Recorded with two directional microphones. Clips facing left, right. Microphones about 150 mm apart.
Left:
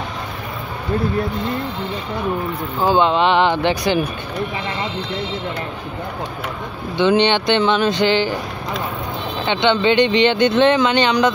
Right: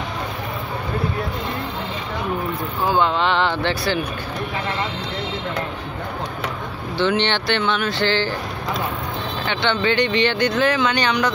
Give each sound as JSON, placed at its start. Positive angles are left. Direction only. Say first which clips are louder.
{"t": 2.9, "sound": "speech", "louder": "left 4 dB", "side_deg": 20}
{"t": 7.0, "sound": "speech", "louder": "left 5 dB", "side_deg": 15}
{"t": 9.5, "sound": "speech", "louder": "left 5 dB", "side_deg": 20}